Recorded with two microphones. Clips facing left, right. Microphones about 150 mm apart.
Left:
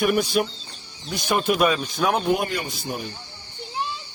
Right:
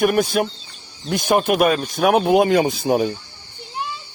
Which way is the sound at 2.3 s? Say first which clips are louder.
Right 12 dB; 90° right.